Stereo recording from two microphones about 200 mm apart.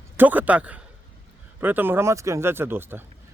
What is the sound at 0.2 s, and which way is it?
A man's voice, 10° right (ahead or behind).